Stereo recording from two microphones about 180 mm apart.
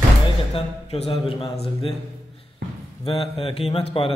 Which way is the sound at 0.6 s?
30° left (ahead or behind).